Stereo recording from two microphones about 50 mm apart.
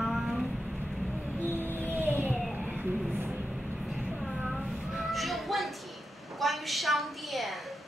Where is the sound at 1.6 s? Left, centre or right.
Right.